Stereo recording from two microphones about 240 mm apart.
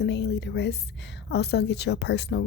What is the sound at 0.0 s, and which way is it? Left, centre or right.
Speech, left.